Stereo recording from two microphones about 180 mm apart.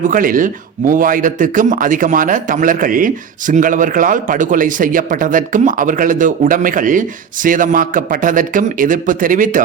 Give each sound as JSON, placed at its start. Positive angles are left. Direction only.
{"t": 0.0, "sound": "a man's voice", "side_deg": -50}